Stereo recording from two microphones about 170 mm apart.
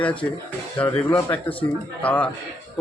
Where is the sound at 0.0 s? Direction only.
10° left (ahead or behind).